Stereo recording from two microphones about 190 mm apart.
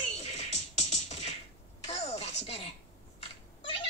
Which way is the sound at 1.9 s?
35° left (ahead or behind).